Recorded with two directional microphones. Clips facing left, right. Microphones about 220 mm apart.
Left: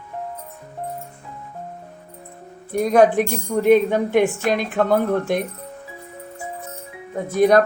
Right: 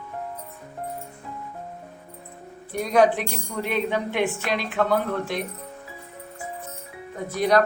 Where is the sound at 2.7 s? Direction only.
50° left (ahead or behind).